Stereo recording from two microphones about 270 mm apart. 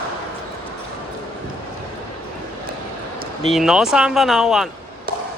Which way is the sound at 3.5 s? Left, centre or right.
Centre.